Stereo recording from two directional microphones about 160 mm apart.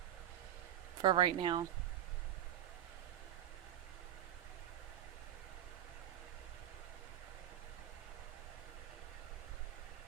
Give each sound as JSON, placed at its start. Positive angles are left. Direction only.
{"t": 1.0, "sound": "speech", "side_deg": -30}